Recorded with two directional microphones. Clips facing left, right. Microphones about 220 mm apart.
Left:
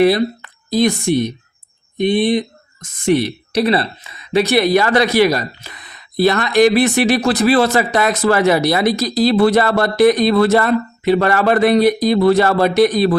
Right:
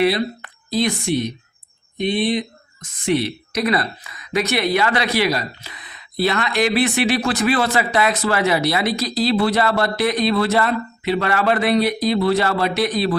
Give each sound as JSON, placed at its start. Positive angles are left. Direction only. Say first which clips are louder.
{"t": 0.7, "sound": "speech", "louder": "left 5 dB", "side_deg": 45}
{"t": 3.5, "sound": "speech", "louder": "left 5 dB", "side_deg": 30}